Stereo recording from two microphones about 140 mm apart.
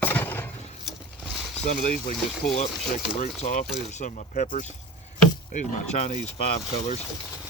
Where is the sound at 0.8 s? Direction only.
Centre (ahead or behind).